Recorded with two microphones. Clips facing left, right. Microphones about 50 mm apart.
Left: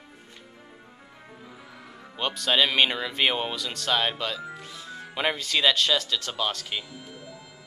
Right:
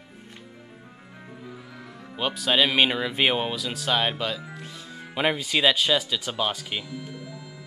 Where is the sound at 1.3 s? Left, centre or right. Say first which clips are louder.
Right 4 dB; centre.